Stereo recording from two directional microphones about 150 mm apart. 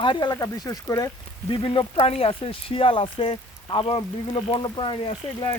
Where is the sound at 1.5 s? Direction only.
35° left (ahead or behind).